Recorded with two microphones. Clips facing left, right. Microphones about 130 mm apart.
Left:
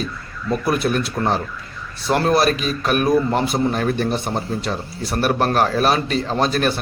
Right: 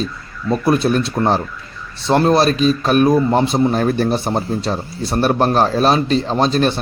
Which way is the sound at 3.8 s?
35° right (ahead or behind).